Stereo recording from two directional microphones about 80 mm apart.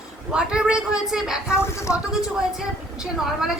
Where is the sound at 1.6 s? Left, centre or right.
Left.